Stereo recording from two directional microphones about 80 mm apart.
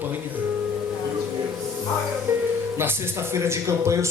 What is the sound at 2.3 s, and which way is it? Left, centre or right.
Music, right.